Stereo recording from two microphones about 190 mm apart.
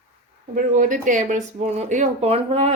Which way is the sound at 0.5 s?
40° right (ahead or behind).